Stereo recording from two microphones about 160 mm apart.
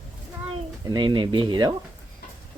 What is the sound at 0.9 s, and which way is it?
Speech, 30° right (ahead or behind).